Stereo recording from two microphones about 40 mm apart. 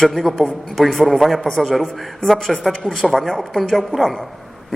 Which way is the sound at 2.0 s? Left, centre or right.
Centre.